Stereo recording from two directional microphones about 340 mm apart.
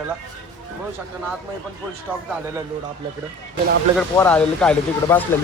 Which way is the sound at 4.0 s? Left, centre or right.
Centre.